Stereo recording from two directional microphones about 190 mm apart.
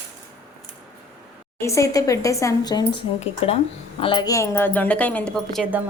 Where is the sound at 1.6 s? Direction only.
15° left (ahead or behind).